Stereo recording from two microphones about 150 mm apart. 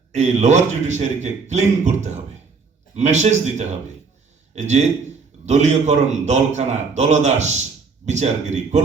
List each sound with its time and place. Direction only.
0.1 s a man's voice: 50° right (ahead or behind)